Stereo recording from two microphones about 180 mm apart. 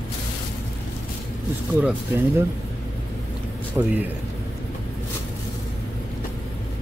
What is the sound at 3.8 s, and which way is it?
Speech, 20° right (ahead or behind).